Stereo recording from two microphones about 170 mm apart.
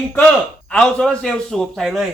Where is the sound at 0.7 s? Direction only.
5° left (ahead or behind).